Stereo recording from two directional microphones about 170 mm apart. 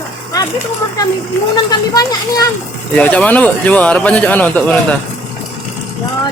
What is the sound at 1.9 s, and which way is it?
Speech, 20° left (ahead or behind).